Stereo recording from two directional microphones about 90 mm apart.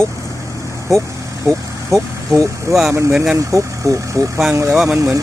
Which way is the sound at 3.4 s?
35° right (ahead or behind).